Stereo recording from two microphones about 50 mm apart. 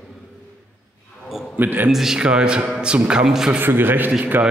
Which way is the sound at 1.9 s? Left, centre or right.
Centre.